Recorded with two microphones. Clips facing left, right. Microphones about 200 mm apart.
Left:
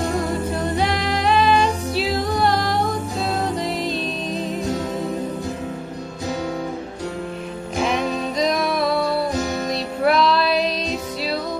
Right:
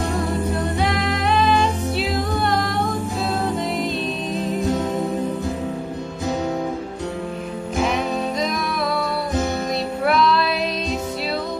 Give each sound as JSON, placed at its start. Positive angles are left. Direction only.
{"t": 0.9, "sound": "music", "side_deg": -55}
{"t": 1.2, "sound": "music", "side_deg": 0}
{"t": 10.0, "sound": "music", "side_deg": 0}